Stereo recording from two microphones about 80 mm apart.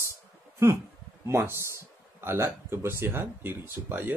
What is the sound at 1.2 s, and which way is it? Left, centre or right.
Speech, right.